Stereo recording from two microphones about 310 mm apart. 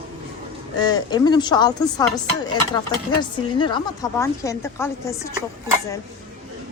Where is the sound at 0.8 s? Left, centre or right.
Centre.